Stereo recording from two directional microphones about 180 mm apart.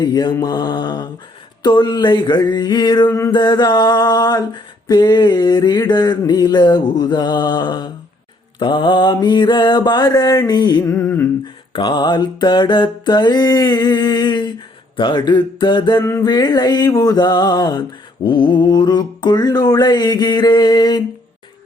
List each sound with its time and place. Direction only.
0.0 s music: 20° left (ahead or behind)
11.7 s music: 25° left (ahead or behind)
16.0 s music: 15° left (ahead or behind)